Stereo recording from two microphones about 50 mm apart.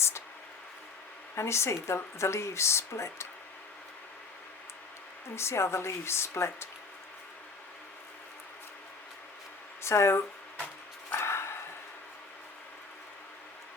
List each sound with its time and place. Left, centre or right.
1.4 s speech: left
5.3 s a woman's voice: left
9.8 s speech: left
11.2 s dog: left